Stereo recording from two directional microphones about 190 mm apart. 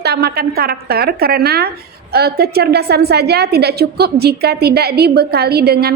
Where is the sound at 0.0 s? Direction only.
60° right (ahead or behind).